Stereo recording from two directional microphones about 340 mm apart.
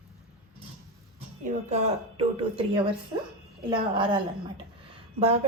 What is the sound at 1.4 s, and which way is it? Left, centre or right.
Speech, right.